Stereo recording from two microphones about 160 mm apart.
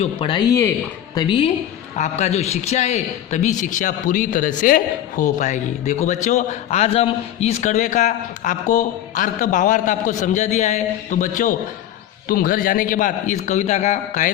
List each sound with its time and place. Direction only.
0.0 s speech: 35° left (ahead or behind)
2.0 s a man's voice: 45° left (ahead or behind)